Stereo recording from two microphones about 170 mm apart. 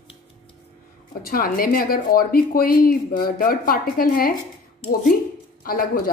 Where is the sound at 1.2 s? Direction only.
55° left (ahead or behind).